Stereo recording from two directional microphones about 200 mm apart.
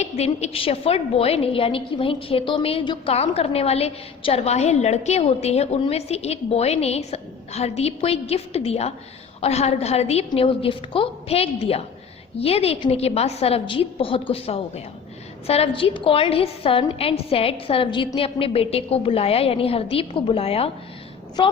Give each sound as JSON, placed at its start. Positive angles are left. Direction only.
{"t": 0.0, "sound": "a woman's voice", "side_deg": 35}